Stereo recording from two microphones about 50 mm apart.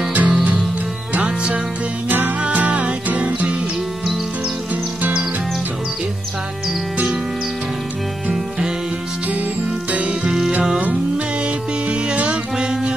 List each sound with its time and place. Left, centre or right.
0.1 s music: right
2.0 s music: right